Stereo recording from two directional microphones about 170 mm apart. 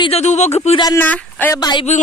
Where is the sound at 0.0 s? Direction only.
40° left (ahead or behind).